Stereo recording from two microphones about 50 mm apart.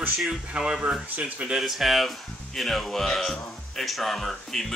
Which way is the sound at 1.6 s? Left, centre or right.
Centre.